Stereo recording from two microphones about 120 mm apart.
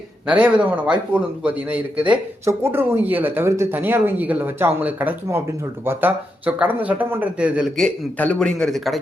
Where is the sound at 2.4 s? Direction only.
20° right (ahead or behind).